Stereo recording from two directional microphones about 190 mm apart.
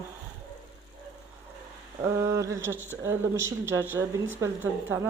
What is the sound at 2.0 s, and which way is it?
Speech, 15° right (ahead or behind).